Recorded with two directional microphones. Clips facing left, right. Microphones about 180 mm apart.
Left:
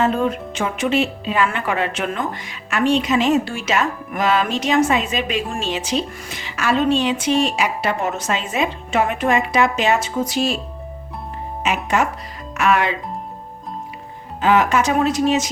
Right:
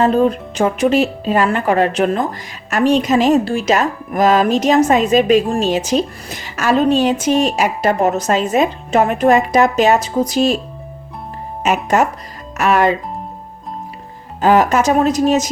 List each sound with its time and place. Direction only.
0.0 s speech: 35° right (ahead or behind)
11.6 s speech: 45° right (ahead or behind)
14.4 s speech: 40° right (ahead or behind)